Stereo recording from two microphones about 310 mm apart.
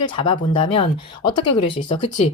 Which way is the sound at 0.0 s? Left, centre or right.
Centre.